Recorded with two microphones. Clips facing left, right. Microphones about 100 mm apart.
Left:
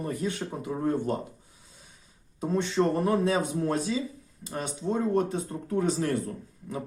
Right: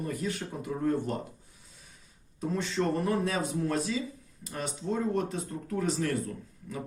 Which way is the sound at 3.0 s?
25° left (ahead or behind).